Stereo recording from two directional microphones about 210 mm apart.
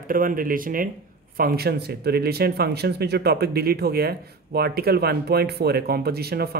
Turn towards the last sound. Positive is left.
turn(degrees=-50)  # may be behind; listen again after turning